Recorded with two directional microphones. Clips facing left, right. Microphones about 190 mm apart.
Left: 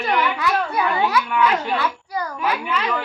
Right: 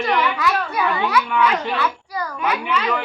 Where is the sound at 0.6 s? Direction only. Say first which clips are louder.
Even; 30° left (ahead or behind).